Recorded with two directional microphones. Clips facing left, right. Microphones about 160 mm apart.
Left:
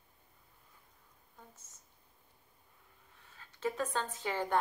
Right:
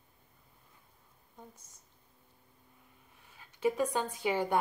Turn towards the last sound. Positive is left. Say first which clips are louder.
# right 5 dB
turn(degrees=-10)  # may be behind; listen again after turning